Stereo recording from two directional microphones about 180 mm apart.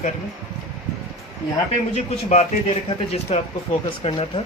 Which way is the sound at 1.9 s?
40° left (ahead or behind).